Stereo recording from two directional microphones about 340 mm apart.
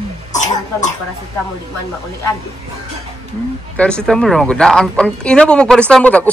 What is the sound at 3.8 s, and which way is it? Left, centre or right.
Speech, centre.